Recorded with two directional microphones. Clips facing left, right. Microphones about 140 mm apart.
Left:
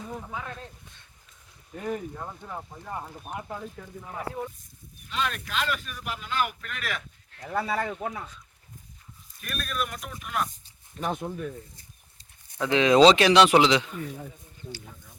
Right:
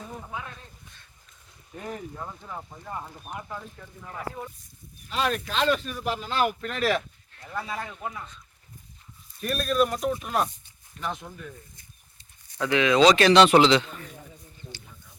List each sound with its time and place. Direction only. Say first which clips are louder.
1.9 s speech: left 4 dB; 10° left (ahead or behind)
5.0 s speech: right 4 dB; 35° right (ahead or behind)
7.3 s speech: left 5 dB; 65° left (ahead or behind)
9.4 s speech: right 9 dB; 30° right (ahead or behind)
11.0 s speech: left 4 dB; 55° left (ahead or behind)
12.5 s speech: left 1 dB; 25° left (ahead or behind)
13.1 s speech: right 2 dB; 10° left (ahead or behind)